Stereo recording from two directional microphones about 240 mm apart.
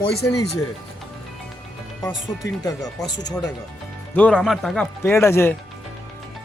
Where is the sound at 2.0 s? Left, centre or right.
Centre.